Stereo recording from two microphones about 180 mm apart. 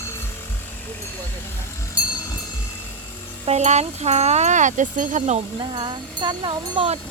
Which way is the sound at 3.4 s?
40° right (ahead or behind).